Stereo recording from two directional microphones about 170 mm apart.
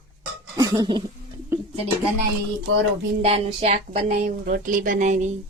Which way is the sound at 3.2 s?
35° right (ahead or behind).